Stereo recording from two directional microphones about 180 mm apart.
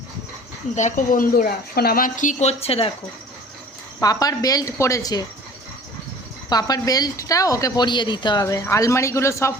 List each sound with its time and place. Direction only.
0.8 s a woman's voice: 45° left (ahead or behind)
4.0 s a woman's voice: 20° left (ahead or behind)
6.5 s a woman's voice: 20° left (ahead or behind)